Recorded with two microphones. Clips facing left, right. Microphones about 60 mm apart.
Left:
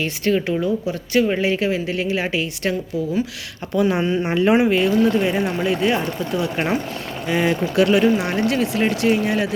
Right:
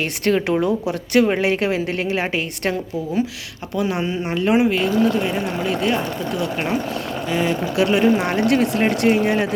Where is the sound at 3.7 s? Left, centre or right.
Centre.